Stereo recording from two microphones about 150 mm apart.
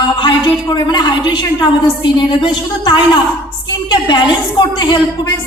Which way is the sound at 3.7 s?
30° left (ahead or behind).